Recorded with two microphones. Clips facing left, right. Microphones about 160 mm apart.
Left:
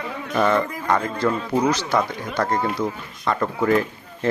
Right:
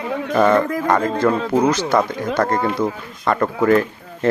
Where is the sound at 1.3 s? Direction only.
75° right (ahead or behind).